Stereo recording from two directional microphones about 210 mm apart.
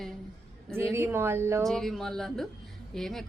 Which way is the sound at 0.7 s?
10° right (ahead or behind).